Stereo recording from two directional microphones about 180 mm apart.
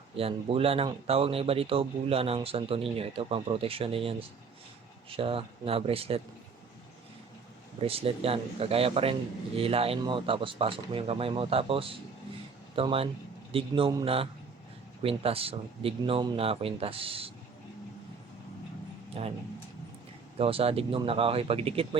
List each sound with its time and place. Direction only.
0.2 s speech: 30° right (ahead or behind)
7.8 s speech: 30° right (ahead or behind)
19.2 s speech: 30° right (ahead or behind)
20.4 s speech: 30° right (ahead or behind)